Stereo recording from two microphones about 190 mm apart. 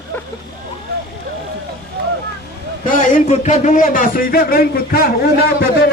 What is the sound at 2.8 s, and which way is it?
A man's voice, 40° left (ahead or behind).